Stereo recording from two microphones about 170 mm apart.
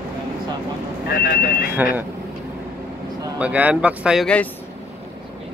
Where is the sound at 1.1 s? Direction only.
65° left (ahead or behind).